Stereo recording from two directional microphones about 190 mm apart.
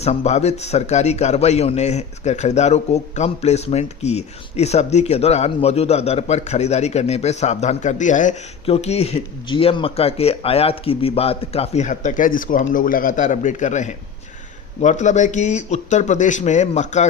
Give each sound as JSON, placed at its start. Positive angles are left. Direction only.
{"t": 0.0, "sound": "a man's voice", "side_deg": 35}